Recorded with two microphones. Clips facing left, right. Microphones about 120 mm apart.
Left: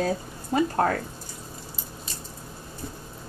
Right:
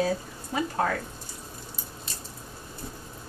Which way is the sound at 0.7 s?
45° left (ahead or behind).